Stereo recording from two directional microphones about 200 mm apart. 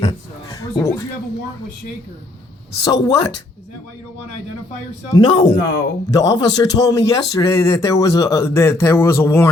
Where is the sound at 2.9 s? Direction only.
20° left (ahead or behind).